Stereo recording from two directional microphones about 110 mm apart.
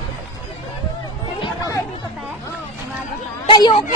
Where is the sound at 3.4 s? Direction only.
40° left (ahead or behind).